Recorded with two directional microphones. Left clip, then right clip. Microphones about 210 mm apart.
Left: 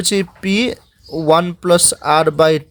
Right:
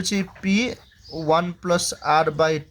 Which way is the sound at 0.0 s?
50° left (ahead or behind).